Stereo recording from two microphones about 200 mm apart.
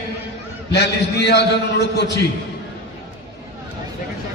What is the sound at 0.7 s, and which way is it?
Speech, 55° left (ahead or behind).